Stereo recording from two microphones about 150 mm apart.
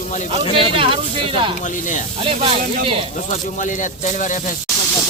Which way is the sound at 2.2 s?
40° right (ahead or behind).